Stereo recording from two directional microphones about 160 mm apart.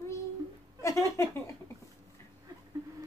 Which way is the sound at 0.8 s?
20° left (ahead or behind).